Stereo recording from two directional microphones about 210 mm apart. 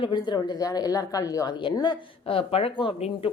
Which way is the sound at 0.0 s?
20° left (ahead or behind).